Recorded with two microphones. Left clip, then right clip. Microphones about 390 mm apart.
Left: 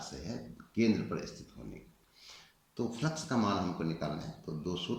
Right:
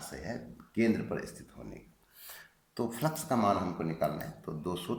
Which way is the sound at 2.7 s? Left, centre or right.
Centre.